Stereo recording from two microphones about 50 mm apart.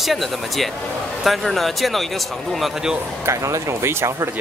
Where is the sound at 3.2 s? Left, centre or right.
Right.